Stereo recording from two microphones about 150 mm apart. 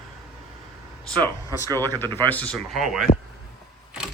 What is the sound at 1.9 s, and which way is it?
Speech, 15° left (ahead or behind).